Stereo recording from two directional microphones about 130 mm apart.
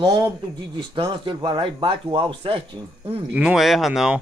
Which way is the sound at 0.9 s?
40° right (ahead or behind).